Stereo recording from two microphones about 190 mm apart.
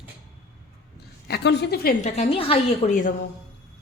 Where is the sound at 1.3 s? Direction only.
65° left (ahead or behind).